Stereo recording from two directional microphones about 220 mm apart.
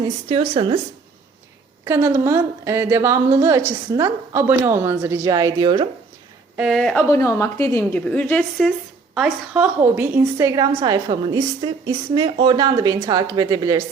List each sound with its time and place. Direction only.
0.0 s speech: 25° right (ahead or behind)
1.8 s a woman's voice: 10° right (ahead or behind)
6.6 s a woman's voice: centre (ahead or behind); by 13.8 s 15° right (ahead or behind)